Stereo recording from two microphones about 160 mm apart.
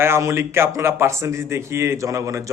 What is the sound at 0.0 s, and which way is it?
A man's voice, 15° right (ahead or behind).